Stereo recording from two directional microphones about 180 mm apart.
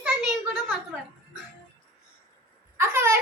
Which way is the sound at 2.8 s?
15° right (ahead or behind).